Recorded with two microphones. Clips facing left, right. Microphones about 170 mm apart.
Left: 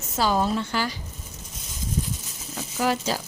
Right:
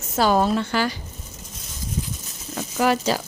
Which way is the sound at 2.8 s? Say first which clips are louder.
Right 4 dB; 70° right (ahead or behind).